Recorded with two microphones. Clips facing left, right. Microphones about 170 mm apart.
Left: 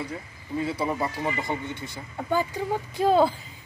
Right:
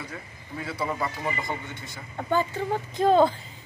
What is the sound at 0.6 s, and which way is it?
A man's voice, 20° left (ahead or behind).